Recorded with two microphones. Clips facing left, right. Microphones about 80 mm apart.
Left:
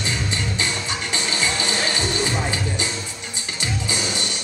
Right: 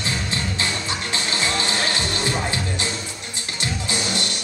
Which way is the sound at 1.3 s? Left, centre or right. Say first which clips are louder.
Right 1 dB; right.